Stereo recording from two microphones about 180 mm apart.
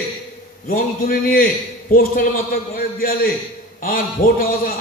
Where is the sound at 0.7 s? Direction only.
50° left (ahead or behind).